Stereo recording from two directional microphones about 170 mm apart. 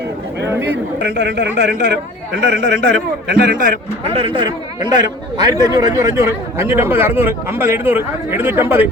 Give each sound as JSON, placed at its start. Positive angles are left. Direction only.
{"t": 0.6, "sound": "a man's voice", "side_deg": -90}
{"t": 4.1, "sound": "a man's voice", "side_deg": -30}